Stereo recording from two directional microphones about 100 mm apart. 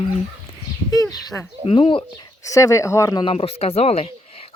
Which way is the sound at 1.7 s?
60° left (ahead or behind).